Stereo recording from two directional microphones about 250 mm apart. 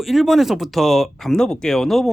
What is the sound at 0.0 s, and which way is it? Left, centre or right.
Speech, centre.